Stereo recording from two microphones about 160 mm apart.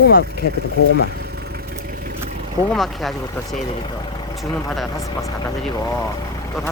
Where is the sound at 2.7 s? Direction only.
Centre (ahead or behind).